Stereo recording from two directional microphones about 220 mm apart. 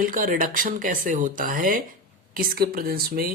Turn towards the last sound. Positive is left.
turn(degrees=-45)  # may be behind; listen again after turning